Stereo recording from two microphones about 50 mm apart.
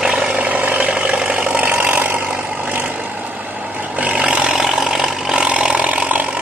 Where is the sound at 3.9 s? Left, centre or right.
Right.